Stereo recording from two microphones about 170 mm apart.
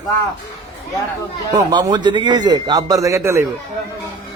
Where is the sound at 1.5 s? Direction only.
25° right (ahead or behind).